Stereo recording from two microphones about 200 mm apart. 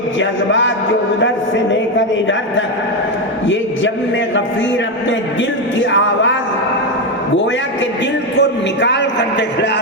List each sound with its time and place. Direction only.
0.2 s a man's voice: 70° left (ahead or behind)
5.8 s a man's voice: 65° left (ahead or behind)
8.4 s a man's voice: 60° left (ahead or behind)